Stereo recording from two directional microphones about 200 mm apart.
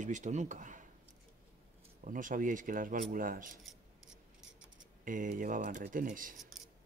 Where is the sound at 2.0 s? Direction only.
40° right (ahead or behind).